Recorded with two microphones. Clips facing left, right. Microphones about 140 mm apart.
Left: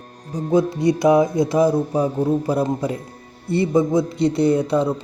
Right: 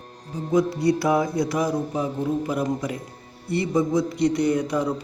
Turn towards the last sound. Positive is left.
turn(degrees=30)  # may be behind; listen again after turning